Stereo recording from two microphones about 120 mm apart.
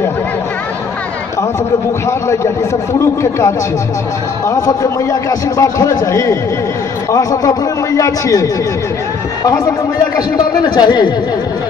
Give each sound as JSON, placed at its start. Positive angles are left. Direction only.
{"t": 2.0, "sound": "a man's voice", "side_deg": 25}
{"t": 10.1, "sound": "a man's voice", "side_deg": 35}